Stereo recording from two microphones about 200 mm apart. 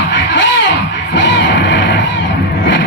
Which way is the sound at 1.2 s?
60° left (ahead or behind).